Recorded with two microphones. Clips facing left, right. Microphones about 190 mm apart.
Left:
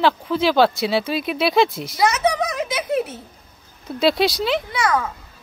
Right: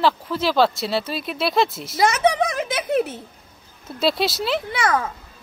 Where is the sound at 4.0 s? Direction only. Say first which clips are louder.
Left 3 dB; centre (ahead or behind).